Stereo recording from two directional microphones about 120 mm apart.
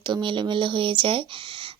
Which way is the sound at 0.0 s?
40° right (ahead or behind).